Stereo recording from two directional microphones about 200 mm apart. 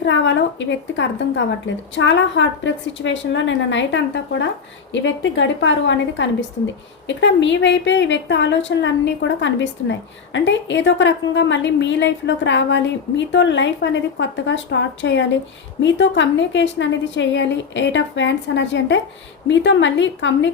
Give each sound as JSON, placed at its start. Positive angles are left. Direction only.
{"t": 0.0, "sound": "a woman's voice", "side_deg": 65}